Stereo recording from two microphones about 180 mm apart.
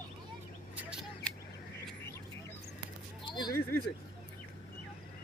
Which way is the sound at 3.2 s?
25° left (ahead or behind).